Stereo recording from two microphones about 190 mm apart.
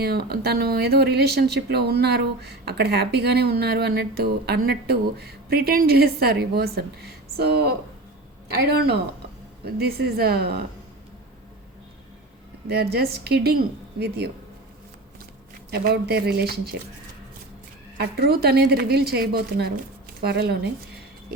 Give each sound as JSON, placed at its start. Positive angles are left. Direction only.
{"t": 0.0, "sound": "speech", "side_deg": -55}
{"t": 12.6, "sound": "speech", "side_deg": -55}
{"t": 15.7, "sound": "speech", "side_deg": -55}
{"t": 17.9, "sound": "speech", "side_deg": -55}